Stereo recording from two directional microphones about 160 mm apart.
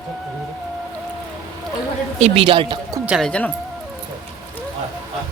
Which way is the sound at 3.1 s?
5° left (ahead or behind).